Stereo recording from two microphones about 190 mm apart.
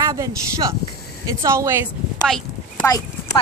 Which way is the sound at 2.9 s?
15° left (ahead or behind).